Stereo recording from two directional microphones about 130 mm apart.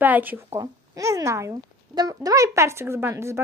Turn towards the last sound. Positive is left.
turn(degrees=-20)  # may be behind; listen again after turning